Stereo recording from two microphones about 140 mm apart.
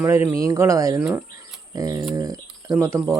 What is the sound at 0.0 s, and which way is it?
Speech, 15° right (ahead or behind).